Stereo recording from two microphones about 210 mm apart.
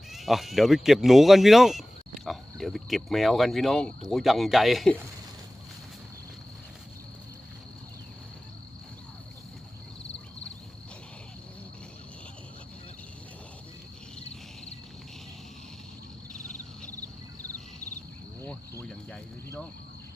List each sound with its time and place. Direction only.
0.1 s speech: centre (ahead or behind)
16.3 s a sound: 35° left (ahead or behind)
18.4 s cricket: 10° left (ahead or behind)